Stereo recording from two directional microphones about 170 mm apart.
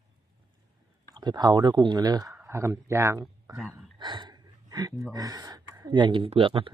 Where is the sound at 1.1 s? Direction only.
25° right (ahead or behind).